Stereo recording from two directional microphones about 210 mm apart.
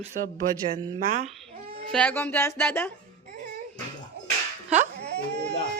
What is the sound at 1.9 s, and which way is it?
Speech, 5° left (ahead or behind).